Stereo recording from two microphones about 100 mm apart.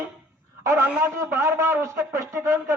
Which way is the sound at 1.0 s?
30° right (ahead or behind).